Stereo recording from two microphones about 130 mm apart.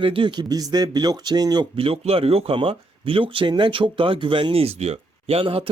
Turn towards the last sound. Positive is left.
turn(degrees=-45)  # may be behind; listen again after turning